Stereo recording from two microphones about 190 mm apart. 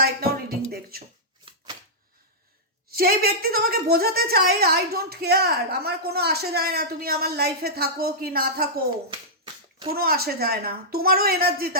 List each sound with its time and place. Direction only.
0.0 s a sound: 55° right (ahead or behind)
0.7 s a woman's voice: 50° right (ahead or behind)
2.9 s a woman's voice: 55° right (ahead or behind)
9.4 s finger snapping: 25° right (ahead or behind)
9.9 s a woman's voice: 55° right (ahead or behind)